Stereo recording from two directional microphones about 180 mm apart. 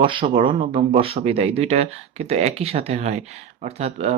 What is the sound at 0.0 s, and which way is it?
Speech, 30° right (ahead or behind).